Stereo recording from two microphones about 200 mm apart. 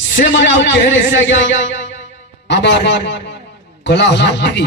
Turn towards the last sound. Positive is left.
turn(degrees=60)  # may be behind; listen again after turning